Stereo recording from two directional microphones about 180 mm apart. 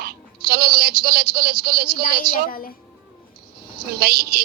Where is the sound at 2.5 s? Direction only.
55° left (ahead or behind).